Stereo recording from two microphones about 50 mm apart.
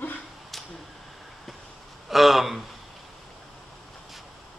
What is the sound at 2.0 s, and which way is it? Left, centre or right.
Speech, centre.